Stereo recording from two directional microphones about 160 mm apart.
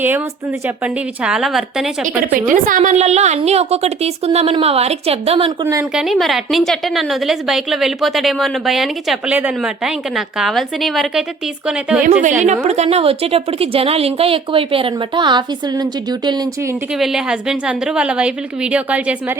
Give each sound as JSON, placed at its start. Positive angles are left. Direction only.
{"t": 1.2, "sound": "a woman's voice", "side_deg": -5}
{"t": 2.3, "sound": "a woman's voice", "side_deg": -55}
{"t": 5.9, "sound": "a woman's voice", "side_deg": -5}
{"t": 12.4, "sound": "a woman's voice", "side_deg": -45}
{"t": 17.0, "sound": "a woman's voice", "side_deg": -5}